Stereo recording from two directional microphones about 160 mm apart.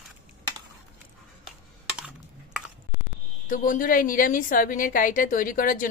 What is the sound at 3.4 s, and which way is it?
A woman's voice, 55° left (ahead or behind).